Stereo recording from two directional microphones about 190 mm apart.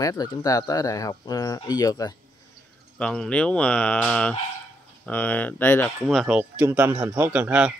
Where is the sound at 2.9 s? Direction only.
5° left (ahead or behind).